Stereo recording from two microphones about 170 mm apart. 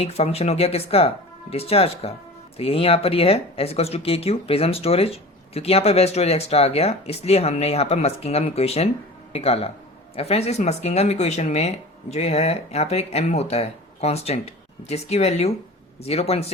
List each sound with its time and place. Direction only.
0.0 s speech: 35° left (ahead or behind)